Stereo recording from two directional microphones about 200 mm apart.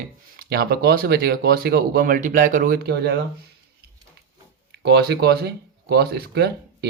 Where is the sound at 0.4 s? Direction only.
50° right (ahead or behind).